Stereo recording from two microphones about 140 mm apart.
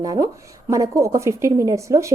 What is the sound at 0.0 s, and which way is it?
A woman's voice, 25° right (ahead or behind).